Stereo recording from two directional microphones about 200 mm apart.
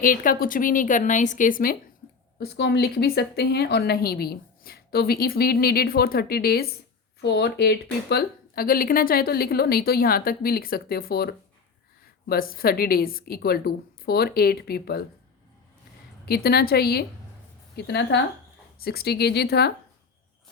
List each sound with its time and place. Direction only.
0.0 s speech: 45° left (ahead or behind)
2.4 s speech: 55° left (ahead or behind)
16.2 s a woman's voice: 50° left (ahead or behind)